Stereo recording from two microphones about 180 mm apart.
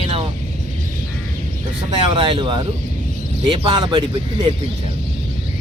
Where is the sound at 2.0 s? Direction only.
30° right (ahead or behind).